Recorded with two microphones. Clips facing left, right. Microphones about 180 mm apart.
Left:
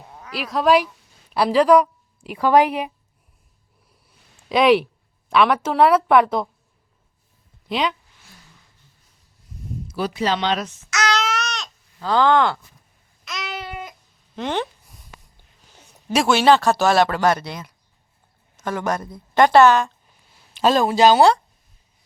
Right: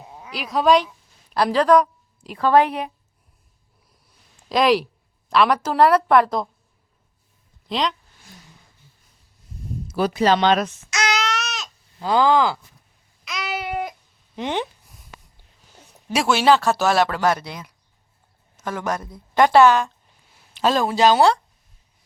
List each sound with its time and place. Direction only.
0.0 s a sound: 10° right (ahead or behind)
0.3 s a woman's voice: centre (ahead or behind)
4.4 s speech: 5° left (ahead or behind)
7.7 s speech: 5° left (ahead or behind)
9.9 s speech: 45° right (ahead or behind)
11.2 s a sound: centre (ahead or behind)
11.9 s speech: 10° right (ahead or behind)
13.2 s a sound: centre (ahead or behind)
14.3 s speech: 15° right (ahead or behind)
16.1 s a woman's voice: 5° right (ahead or behind)
20.6 s speech: 20° left (ahead or behind)